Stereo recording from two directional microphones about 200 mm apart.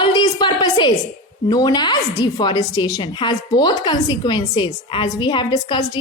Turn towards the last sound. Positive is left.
turn(degrees=25)  # may be behind; listen again after turning